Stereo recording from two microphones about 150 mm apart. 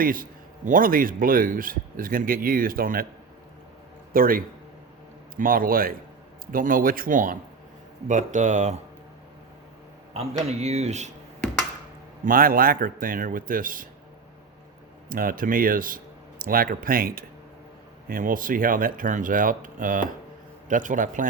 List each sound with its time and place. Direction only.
0.0 s a man's voice: 70° right (ahead or behind)
4.1 s a man's voice: 70° right (ahead or behind); by 8.8 s 55° right (ahead or behind)
10.6 s speech: 45° right (ahead or behind)
12.2 s a man's voice: 70° right (ahead or behind)
15.1 s a man's voice: 70° right (ahead or behind)